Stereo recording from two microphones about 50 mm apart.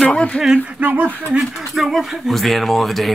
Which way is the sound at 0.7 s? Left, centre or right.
Right.